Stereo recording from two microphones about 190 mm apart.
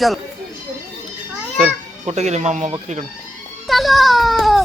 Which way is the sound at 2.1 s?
35° right (ahead or behind).